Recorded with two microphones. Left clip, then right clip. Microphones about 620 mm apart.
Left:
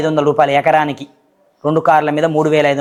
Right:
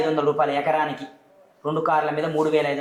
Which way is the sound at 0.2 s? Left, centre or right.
Left.